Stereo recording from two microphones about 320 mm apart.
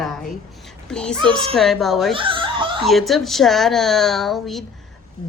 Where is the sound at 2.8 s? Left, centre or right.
Centre.